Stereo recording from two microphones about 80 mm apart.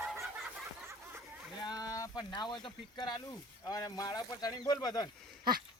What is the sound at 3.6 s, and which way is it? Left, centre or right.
Speech, left.